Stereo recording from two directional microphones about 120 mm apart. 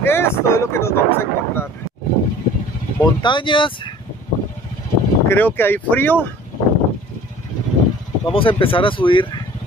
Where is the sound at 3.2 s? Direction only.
40° left (ahead or behind).